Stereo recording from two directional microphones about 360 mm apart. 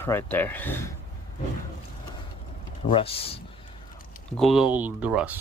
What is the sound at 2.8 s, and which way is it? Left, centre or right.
Speech, centre.